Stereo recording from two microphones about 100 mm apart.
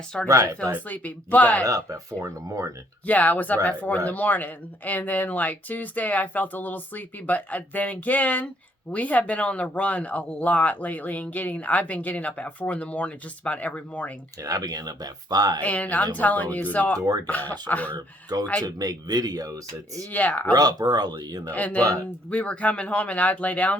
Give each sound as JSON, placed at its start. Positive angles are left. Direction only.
{"t": 0.3, "sound": "speech", "side_deg": -35}
{"t": 0.9, "sound": "speech", "side_deg": 15}
{"t": 1.6, "sound": "speech", "side_deg": -35}
{"t": 3.1, "sound": "speech", "side_deg": 15}
{"t": 14.4, "sound": "speech", "side_deg": -35}
{"t": 15.6, "sound": "speech", "side_deg": 15}
{"t": 17.9, "sound": "speech", "side_deg": -40}
{"t": 20.1, "sound": "speech", "side_deg": 15}
{"t": 20.5, "sound": "speech", "side_deg": -40}
{"t": 21.5, "sound": "speech", "side_deg": 15}